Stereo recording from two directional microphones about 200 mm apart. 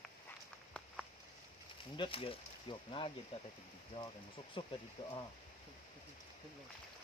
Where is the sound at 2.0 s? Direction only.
25° left (ahead or behind).